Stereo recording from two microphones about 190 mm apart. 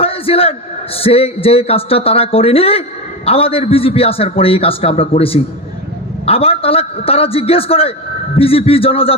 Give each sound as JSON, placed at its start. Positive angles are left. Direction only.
{"t": 0.0, "sound": "a man's voice", "side_deg": 30}